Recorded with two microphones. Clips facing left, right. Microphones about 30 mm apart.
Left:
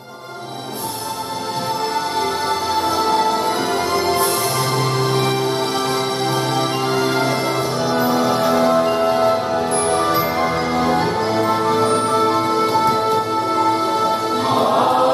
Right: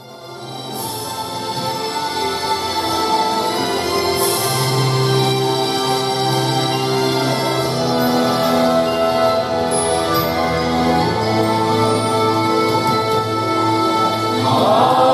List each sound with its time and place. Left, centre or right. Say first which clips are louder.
2.7 s music: left 2 dB; right
8.0 s music: even; right
14.6 s choir: right 3 dB; right